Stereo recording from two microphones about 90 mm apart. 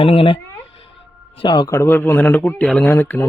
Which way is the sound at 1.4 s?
60° left (ahead or behind).